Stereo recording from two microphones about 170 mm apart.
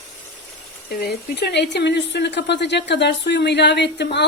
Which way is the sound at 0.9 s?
65° left (ahead or behind).